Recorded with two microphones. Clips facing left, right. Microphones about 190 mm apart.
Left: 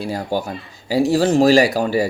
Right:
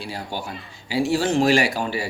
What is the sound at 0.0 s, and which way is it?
Speech, 45° left (ahead or behind).